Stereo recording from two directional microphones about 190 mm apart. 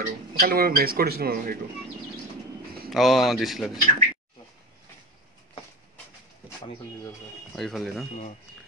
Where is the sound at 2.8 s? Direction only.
Centre (ahead or behind).